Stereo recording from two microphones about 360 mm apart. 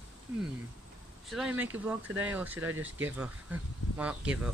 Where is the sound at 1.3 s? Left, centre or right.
Centre.